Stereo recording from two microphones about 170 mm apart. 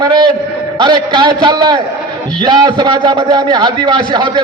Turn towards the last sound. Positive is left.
turn(degrees=-25)  # may be behind; listen again after turning